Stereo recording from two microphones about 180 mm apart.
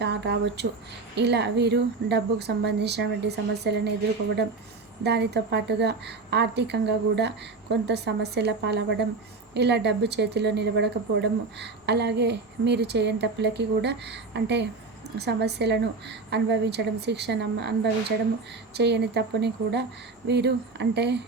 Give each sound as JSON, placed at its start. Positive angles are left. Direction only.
{"t": 0.0, "sound": "speech", "side_deg": -70}
{"t": 5.0, "sound": "speech", "side_deg": -70}